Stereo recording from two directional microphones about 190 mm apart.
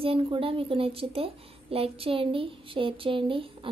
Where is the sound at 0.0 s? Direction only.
30° right (ahead or behind).